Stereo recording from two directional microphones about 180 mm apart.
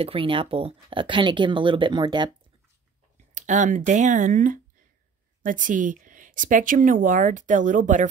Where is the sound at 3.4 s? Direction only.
45° right (ahead or behind).